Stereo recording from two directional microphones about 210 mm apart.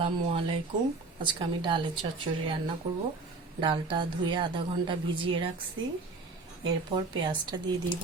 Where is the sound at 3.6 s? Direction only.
25° right (ahead or behind).